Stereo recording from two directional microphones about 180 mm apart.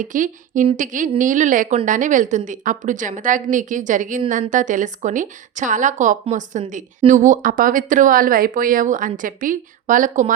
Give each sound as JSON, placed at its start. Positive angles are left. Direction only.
{"t": 0.0, "sound": "speech", "side_deg": -45}